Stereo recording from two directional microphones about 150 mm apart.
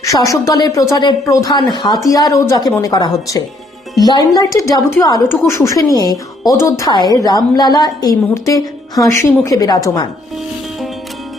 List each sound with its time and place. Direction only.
0.0 s a woman's voice: 20° left (ahead or behind)